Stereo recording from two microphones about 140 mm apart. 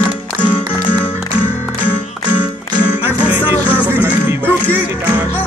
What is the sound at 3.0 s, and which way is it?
Music, 15° right (ahead or behind).